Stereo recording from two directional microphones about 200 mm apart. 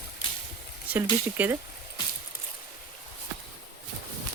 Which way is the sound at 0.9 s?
10° right (ahead or behind).